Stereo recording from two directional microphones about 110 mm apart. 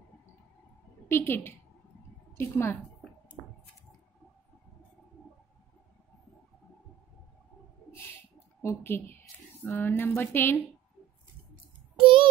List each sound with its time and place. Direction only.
1.0 s a woman's voice: 20° left (ahead or behind)
8.6 s speech: 20° left (ahead or behind)
12.0 s child singing: 55° right (ahead or behind)